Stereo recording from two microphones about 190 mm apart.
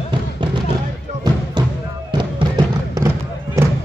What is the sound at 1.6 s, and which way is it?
Music, 25° right (ahead or behind).